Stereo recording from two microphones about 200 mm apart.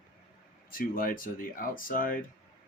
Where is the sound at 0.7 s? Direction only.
45° left (ahead or behind).